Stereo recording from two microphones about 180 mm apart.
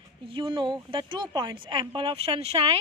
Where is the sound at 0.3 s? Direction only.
25° right (ahead or behind).